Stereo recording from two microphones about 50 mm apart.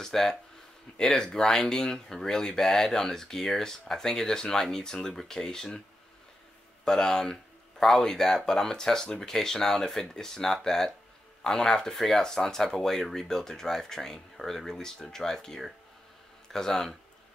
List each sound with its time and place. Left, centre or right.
0.0 s speech: centre
6.8 s a sound: centre
7.1 s speech: centre